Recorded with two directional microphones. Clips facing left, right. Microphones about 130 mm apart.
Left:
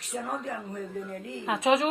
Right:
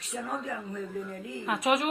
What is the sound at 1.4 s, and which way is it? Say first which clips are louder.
Speech: left 3 dB; 25° left (ahead or behind).